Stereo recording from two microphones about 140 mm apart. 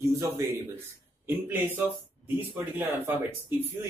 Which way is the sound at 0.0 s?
20° right (ahead or behind).